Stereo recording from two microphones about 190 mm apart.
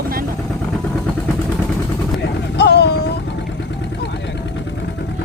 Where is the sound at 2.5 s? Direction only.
60° left (ahead or behind).